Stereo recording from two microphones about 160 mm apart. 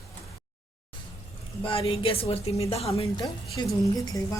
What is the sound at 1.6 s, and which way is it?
A woman's voice, 35° left (ahead or behind).